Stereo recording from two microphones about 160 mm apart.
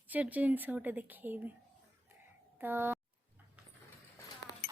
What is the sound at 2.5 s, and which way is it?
Speech, 10° right (ahead or behind).